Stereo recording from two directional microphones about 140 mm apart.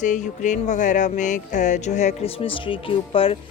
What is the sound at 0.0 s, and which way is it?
Music, 60° left (ahead or behind).